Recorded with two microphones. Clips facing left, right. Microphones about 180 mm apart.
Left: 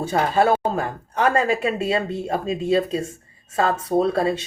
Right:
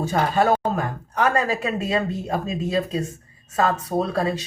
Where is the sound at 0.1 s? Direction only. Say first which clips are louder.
Left 2 dB; 30° left (ahead or behind).